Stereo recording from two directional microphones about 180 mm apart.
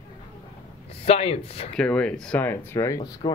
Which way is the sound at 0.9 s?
35° left (ahead or behind).